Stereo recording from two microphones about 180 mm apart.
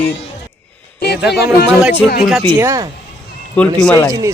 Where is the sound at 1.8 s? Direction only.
10° right (ahead or behind).